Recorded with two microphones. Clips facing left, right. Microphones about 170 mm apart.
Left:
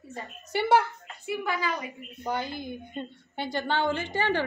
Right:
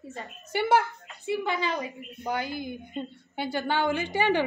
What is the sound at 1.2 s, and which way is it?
Speech, 25° right (ahead or behind).